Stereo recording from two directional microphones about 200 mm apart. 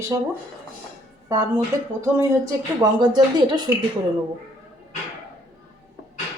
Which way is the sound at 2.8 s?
20° right (ahead or behind).